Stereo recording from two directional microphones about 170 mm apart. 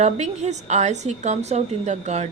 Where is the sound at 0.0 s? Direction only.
40° right (ahead or behind).